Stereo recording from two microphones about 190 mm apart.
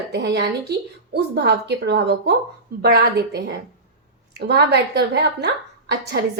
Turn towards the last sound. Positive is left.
turn(degrees=-60)  # may be behind; listen again after turning